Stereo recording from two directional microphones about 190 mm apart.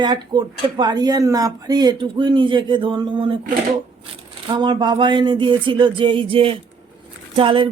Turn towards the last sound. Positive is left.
turn(degrees=-25)  # may be behind; listen again after turning